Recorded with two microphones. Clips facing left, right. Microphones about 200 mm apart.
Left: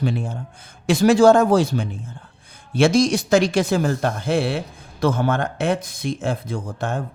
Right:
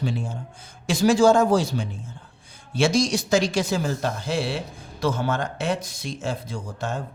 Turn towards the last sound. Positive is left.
turn(degrees=55)  # may be behind; listen again after turning